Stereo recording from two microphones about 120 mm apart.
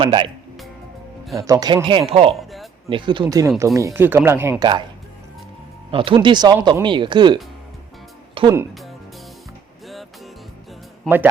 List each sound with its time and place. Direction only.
0.0 s speech: 45° right (ahead or behind)
1.4 s speech: 30° right (ahead or behind); by 2.3 s 50° right (ahead or behind)
2.3 s a sound: centre (ahead or behind)
2.9 s speech: 40° right (ahead or behind); by 4.5 s 20° right (ahead or behind)
4.6 s speech: 40° right (ahead or behind)
5.9 s speech: 45° right (ahead or behind)
8.4 s speech: 45° right (ahead or behind)
8.7 s music: centre (ahead or behind)
11.1 s a man's voice: 5° left (ahead or behind)